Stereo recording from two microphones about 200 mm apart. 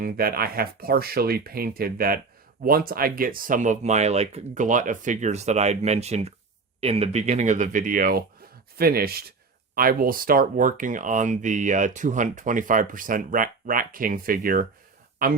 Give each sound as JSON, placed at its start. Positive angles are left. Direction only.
{"t": 0.0, "sound": "speech", "side_deg": -50}